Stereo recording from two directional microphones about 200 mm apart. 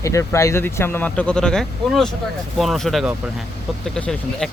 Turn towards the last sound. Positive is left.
turn(degrees=5)  # may be behind; listen again after turning